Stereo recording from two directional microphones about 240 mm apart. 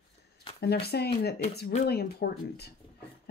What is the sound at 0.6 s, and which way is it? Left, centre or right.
Speech, left.